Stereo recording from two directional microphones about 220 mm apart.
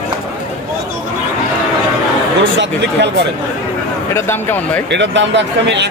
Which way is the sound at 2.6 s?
50° right (ahead or behind).